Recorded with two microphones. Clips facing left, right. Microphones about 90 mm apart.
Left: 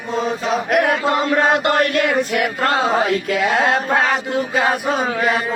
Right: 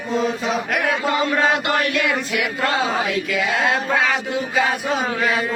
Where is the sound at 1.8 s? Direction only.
45° left (ahead or behind).